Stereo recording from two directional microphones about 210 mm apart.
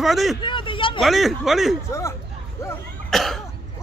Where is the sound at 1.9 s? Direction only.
15° left (ahead or behind).